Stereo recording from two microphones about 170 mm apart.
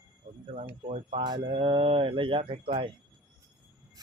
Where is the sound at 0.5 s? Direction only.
35° right (ahead or behind).